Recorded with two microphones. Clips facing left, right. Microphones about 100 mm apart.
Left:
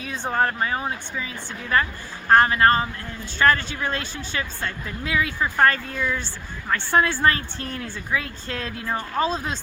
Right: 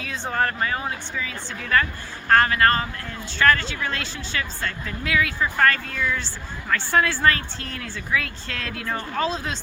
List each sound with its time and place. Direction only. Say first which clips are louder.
0.0 s a woman's voice: left 1 dB; 20° left (ahead or behind)
8.9 s speech: left 1 dB; 15° left (ahead or behind)